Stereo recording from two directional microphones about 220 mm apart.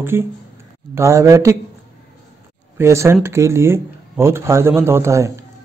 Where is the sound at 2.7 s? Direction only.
10° right (ahead or behind).